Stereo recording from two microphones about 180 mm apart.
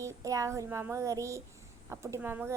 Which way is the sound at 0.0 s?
15° right (ahead or behind).